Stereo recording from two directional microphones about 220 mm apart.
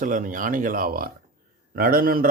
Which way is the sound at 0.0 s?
35° right (ahead or behind).